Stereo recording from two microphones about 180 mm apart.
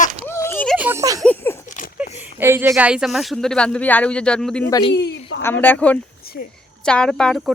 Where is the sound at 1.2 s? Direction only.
10° left (ahead or behind).